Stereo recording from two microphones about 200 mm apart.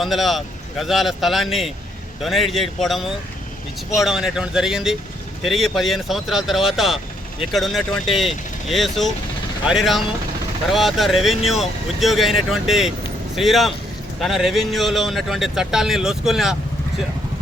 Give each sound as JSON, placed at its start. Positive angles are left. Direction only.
{"t": 0.0, "sound": "speech", "side_deg": 0}